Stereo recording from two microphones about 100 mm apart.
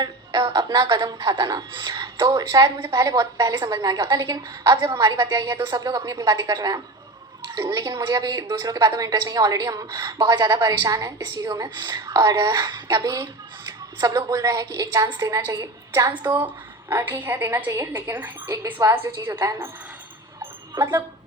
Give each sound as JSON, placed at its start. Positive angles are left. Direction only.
{"t": 0.0, "sound": "a woman's voice", "side_deg": -50}
{"t": 6.1, "sound": "a woman's voice", "side_deg": -30}
{"t": 18.4, "sound": "a woman's voice", "side_deg": -30}
{"t": 20.4, "sound": "dog", "side_deg": -25}